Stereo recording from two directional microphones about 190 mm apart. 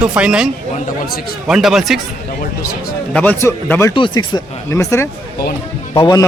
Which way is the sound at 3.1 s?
10° left (ahead or behind).